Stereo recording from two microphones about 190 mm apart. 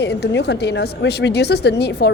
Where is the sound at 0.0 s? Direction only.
60° left (ahead or behind).